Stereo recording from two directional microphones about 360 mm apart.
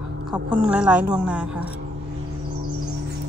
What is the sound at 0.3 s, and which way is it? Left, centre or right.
A woman's voice, centre.